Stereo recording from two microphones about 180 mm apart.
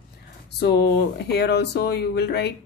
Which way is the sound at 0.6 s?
65° left (ahead or behind).